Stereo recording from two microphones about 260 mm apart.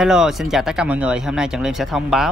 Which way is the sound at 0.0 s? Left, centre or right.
Centre.